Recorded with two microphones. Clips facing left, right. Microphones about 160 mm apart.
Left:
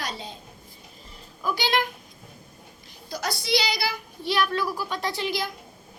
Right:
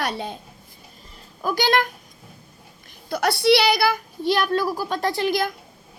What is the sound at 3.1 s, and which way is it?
A woman's voice, 65° right (ahead or behind).